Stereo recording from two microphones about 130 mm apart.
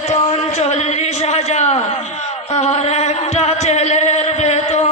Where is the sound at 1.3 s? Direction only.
55° left (ahead or behind).